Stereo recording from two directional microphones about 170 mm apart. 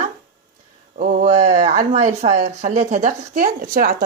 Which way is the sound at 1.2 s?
40° right (ahead or behind).